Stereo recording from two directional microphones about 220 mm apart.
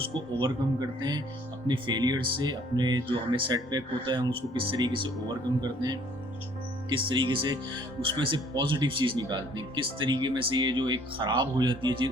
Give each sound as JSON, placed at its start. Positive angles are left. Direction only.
{"t": 0.1, "sound": "speech", "side_deg": -20}